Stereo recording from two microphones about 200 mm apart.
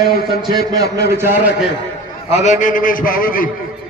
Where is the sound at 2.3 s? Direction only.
35° left (ahead or behind).